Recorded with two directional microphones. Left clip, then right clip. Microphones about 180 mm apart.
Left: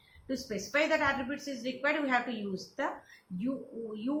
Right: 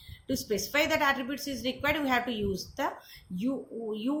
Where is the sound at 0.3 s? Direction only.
60° right (ahead or behind).